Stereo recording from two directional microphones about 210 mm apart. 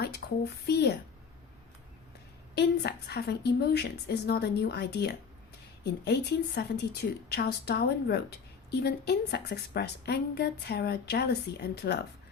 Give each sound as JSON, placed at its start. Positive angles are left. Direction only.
{"t": 0.0, "sound": "a woman's voice", "side_deg": 50}
{"t": 2.6, "sound": "a woman's voice", "side_deg": 50}